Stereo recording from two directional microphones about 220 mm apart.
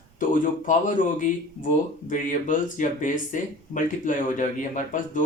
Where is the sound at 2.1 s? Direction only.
35° left (ahead or behind).